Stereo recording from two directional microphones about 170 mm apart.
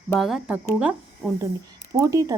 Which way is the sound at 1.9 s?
20° right (ahead or behind).